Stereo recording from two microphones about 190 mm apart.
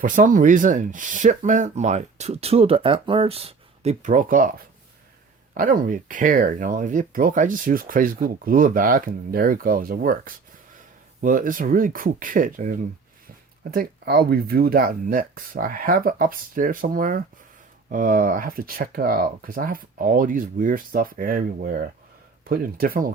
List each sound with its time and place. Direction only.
0.0 s speech: 45° right (ahead or behind)
5.5 s speech: 45° right (ahead or behind)